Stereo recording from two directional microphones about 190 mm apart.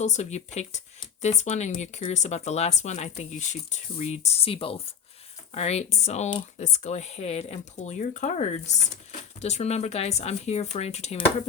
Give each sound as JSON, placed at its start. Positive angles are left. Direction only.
{"t": 0.0, "sound": "speech", "side_deg": 35}